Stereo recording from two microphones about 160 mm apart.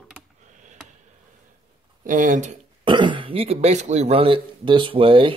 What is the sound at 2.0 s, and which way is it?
Speech, 55° right (ahead or behind).